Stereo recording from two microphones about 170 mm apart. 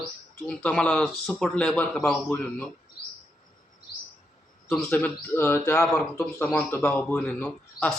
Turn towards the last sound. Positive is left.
turn(degrees=10)  # may be behind; listen again after turning